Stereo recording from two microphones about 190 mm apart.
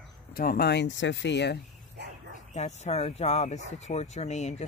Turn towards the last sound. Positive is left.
turn(degrees=35)  # may be behind; listen again after turning